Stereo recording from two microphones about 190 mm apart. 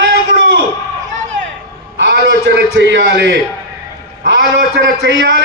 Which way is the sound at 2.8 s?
70° right (ahead or behind).